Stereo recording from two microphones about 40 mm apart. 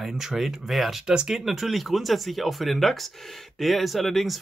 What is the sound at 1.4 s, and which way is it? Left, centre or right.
Speech, centre.